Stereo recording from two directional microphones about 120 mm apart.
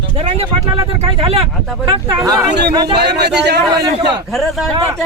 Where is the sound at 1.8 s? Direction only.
40° right (ahead or behind).